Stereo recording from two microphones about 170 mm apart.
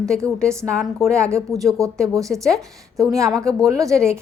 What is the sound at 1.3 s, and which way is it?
Speech, 20° right (ahead or behind).